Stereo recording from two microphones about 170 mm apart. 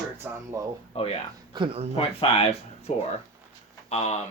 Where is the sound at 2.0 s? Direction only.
35° left (ahead or behind).